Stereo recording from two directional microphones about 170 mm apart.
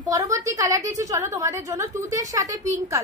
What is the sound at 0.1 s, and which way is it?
A child's voice, 20° right (ahead or behind).